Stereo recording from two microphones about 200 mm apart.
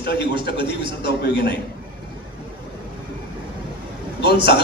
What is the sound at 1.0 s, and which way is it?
Speech, 55° left (ahead or behind).